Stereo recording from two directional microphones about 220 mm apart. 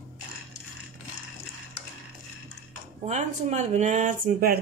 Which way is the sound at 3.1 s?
30° right (ahead or behind).